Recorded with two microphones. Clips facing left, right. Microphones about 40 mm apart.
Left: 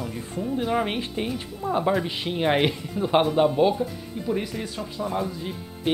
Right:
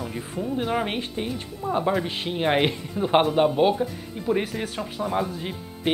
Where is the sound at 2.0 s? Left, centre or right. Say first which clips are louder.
Even; centre.